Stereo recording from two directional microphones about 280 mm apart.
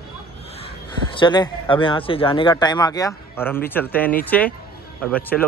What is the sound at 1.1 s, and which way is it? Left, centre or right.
A man's voice, centre.